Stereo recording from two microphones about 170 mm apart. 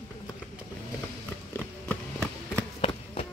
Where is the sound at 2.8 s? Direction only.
35° left (ahead or behind).